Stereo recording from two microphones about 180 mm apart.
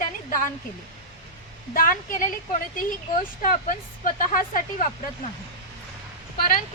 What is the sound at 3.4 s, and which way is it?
Speech, 50° left (ahead or behind).